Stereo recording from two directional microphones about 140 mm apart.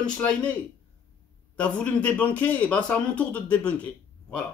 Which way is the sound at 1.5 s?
10° left (ahead or behind).